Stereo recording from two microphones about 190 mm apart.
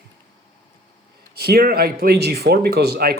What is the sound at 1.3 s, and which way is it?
Speech, 55° right (ahead or behind).